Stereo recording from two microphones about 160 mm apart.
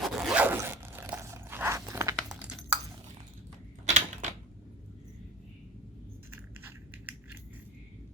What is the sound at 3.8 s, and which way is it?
Typewriter, 45° right (ahead or behind).